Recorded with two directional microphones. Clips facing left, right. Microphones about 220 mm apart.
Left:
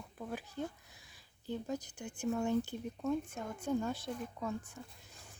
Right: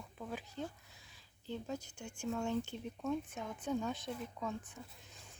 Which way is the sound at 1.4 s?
15° left (ahead or behind).